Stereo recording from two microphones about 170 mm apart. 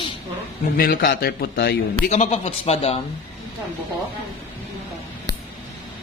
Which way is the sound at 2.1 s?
40° left (ahead or behind).